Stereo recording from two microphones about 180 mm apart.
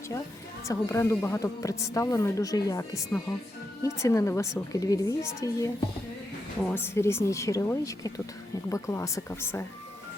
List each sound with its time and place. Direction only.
0.6 s speech: 15° left (ahead or behind)